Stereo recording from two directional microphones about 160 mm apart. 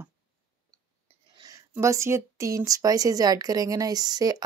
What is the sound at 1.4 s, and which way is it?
Speech, 20° right (ahead or behind).